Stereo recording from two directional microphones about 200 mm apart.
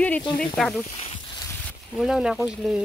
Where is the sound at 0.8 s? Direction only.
30° left (ahead or behind).